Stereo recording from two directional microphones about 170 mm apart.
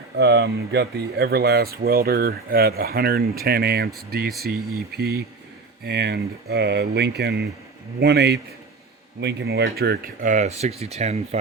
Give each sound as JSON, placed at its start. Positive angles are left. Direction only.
{"t": 0.2, "sound": "speech", "side_deg": -80}
{"t": 10.2, "sound": "speech", "side_deg": -45}